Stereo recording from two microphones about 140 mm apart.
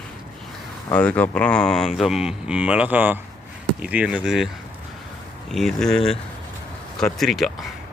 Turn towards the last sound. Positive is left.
turn(degrees=0)  # may be behind; listen again after turning